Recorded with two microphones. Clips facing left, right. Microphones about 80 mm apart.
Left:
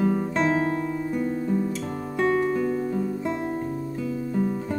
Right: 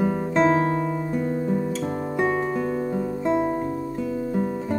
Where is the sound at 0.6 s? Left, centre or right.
Right.